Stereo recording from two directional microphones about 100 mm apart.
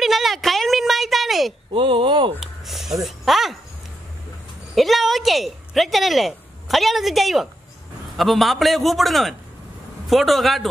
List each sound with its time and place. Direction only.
0.0 s a sound: centre (ahead or behind)
1.7 s speech: 55° right (ahead or behind)
2.4 s speech: centre (ahead or behind)
4.7 s speech: centre (ahead or behind)